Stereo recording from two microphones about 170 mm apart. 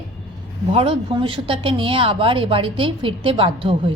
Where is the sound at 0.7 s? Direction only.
35° right (ahead or behind).